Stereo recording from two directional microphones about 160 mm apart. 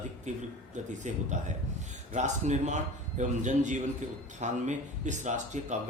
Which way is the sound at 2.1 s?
45° right (ahead or behind).